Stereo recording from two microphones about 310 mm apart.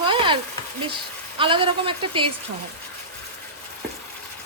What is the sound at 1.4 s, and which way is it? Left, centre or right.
Speech, centre.